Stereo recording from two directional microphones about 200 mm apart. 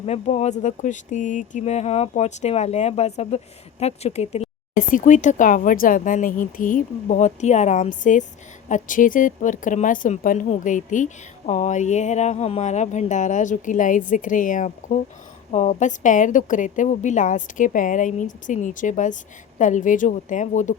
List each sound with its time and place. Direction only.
0.0 s speech: 35° left (ahead or behind)